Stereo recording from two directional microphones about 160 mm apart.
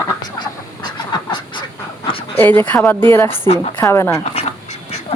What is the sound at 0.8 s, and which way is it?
Fowl, 25° left (ahead or behind).